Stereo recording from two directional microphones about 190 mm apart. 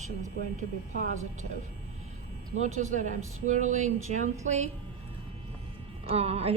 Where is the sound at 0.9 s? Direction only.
40° right (ahead or behind).